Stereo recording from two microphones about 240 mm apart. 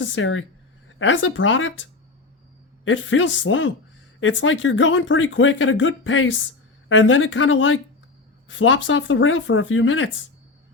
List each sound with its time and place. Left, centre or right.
0.0 s speech: left